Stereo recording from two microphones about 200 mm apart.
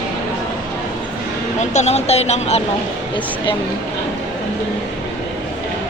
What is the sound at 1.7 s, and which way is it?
Speech, 30° left (ahead or behind).